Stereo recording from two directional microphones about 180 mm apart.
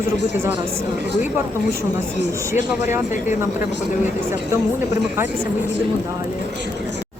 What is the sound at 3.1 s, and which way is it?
Speech, 45° left (ahead or behind).